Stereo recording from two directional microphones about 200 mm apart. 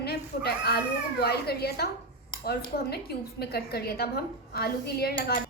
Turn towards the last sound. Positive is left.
turn(degrees=45)  # may be behind; listen again after turning